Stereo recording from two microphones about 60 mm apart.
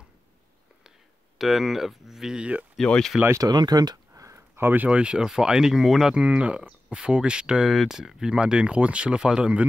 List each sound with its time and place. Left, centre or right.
1.4 s speech: centre
2.3 s speech: centre
3.3 s a sound: right
4.6 s speech: right
4.8 s speech: centre
6.1 s speech: centre
7.6 s speech: centre